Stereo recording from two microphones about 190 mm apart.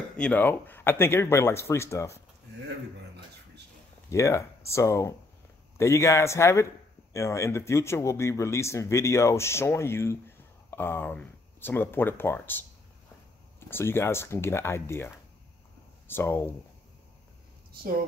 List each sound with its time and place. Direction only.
0.2 s speech: 10° left (ahead or behind)
4.1 s speech: 15° left (ahead or behind)